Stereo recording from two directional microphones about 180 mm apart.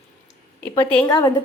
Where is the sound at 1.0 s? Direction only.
20° left (ahead or behind).